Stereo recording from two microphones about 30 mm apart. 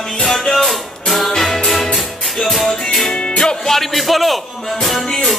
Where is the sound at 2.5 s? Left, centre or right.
Centre.